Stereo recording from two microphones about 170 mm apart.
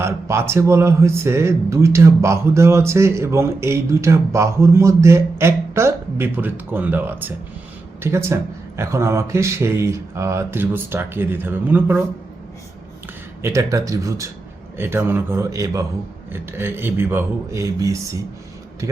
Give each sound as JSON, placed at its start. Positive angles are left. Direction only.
{"t": 0.0, "sound": "speech", "side_deg": -15}
{"t": 13.4, "sound": "speech", "side_deg": -15}